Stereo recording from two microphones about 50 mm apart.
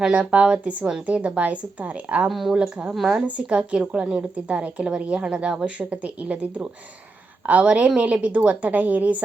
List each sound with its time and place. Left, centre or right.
0.1 s speech: right
2.2 s speech: centre
2.6 s speech: right
2.9 s speech: centre
3.2 s speech: right